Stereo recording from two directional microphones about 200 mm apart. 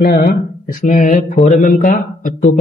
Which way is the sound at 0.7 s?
40° left (ahead or behind).